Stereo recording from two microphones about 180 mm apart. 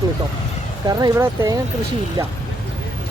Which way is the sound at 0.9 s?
20° right (ahead or behind).